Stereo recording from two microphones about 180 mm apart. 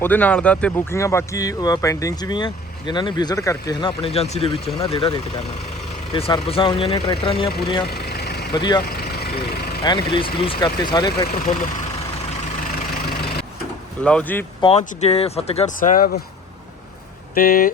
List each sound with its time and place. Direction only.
0.0 s speech: 10° left (ahead or behind); by 7.9 s 30° left (ahead or behind)
7.9 s vehicle: 60° left (ahead or behind)
8.5 s speech: 25° left (ahead or behind)
8.8 s vehicle: 55° left (ahead or behind)
9.8 s speech: 25° left (ahead or behind)
13.1 s vehicle: 60° left (ahead or behind)
14.0 s speech: 5° left (ahead or behind)
14.6 s speech: 35° left (ahead or behind)
15.8 s speech: 50° left (ahead or behind)
17.3 s speech: 55° left (ahead or behind)